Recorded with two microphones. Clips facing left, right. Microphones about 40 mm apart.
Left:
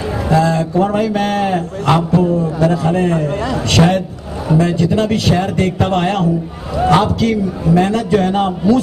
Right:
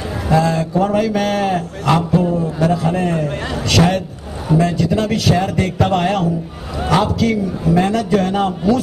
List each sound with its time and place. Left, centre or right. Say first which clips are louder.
0.3 s a man's voice: left 1 dB; left
3.8 s a man's voice: left 2 dB; centre
4.6 s a man's voice: left 2 dB; left